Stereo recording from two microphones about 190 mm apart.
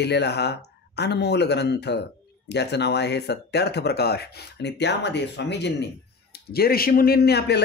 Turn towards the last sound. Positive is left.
turn(degrees=60)  # may be behind; listen again after turning